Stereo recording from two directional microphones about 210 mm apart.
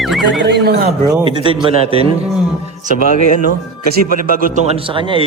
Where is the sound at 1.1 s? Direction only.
20° right (ahead or behind).